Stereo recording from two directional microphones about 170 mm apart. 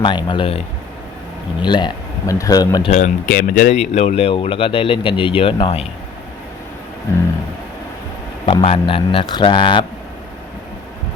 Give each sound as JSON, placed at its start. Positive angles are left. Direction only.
{"t": 0.0, "sound": "speech", "side_deg": 25}
{"t": 1.6, "sound": "speech", "side_deg": 25}
{"t": 2.9, "sound": "speech", "side_deg": 50}
{"t": 7.1, "sound": "a sound", "side_deg": 15}
{"t": 8.4, "sound": "speech", "side_deg": 35}